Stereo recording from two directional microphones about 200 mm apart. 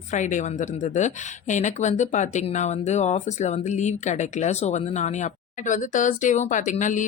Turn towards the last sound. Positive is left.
turn(degrees=40)  # may be behind; listen again after turning